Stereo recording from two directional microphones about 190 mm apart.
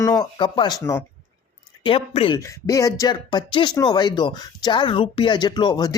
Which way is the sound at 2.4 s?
15° left (ahead or behind).